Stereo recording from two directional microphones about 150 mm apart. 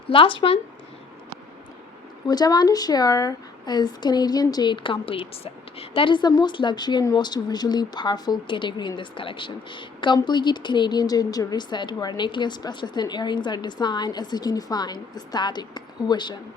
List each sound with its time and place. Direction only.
0.1 s speech: 35° left (ahead or behind)
2.2 s a woman's voice: 25° left (ahead or behind)